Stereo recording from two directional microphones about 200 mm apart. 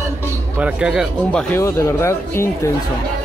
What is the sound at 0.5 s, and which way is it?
Speech, 5° right (ahead or behind).